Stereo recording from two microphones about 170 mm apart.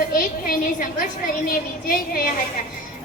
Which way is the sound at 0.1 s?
55° left (ahead or behind).